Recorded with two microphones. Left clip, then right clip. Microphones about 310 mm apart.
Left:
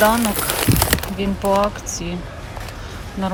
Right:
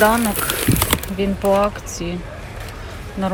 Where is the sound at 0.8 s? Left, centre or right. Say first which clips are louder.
Left 1 dB; centre.